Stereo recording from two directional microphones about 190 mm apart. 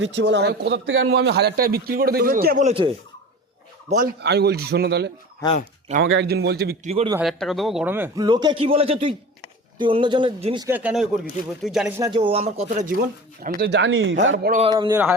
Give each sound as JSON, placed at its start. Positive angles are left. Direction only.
{"t": 0.0, "sound": "a man's voice", "side_deg": -65}
{"t": 2.6, "sound": "speech", "side_deg": -30}
{"t": 3.8, "sound": "a man's voice", "side_deg": -45}
{"t": 4.2, "sound": "a man's voice", "side_deg": -60}
{"t": 5.4, "sound": "speech", "side_deg": 20}
{"t": 6.1, "sound": "a man's voice", "side_deg": -65}
{"t": 6.8, "sound": "speech", "side_deg": -30}
{"t": 7.2, "sound": "a man's voice", "side_deg": 0}
{"t": 10.7, "sound": "speech", "side_deg": -10}
{"t": 11.9, "sound": "speech", "side_deg": -20}
{"t": 13.6, "sound": "speech", "side_deg": -65}
{"t": 14.7, "sound": "speech", "side_deg": -20}